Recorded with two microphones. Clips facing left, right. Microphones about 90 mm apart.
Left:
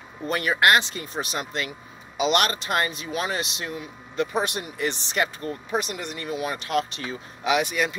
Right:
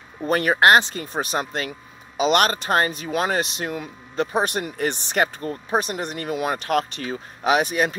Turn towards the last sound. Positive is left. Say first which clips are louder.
# right 3 dB
turn(degrees=-45)  # may be behind; listen again after turning